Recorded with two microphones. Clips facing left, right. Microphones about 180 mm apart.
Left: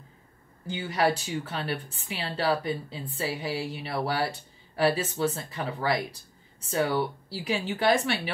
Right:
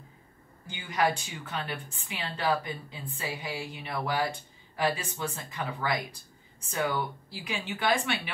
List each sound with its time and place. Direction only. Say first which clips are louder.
0.7 s a woman's voice: left 3 dB; 35° left (ahead or behind)